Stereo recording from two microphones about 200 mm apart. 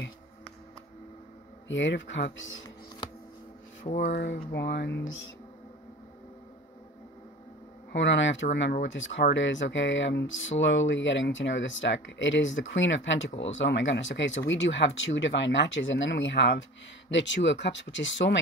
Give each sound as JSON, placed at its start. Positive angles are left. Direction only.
{"t": 1.7, "sound": "speech", "side_deg": 65}
{"t": 3.8, "sound": "speech", "side_deg": 35}
{"t": 4.5, "sound": "speech", "side_deg": 55}
{"t": 7.9, "sound": "speech", "side_deg": 65}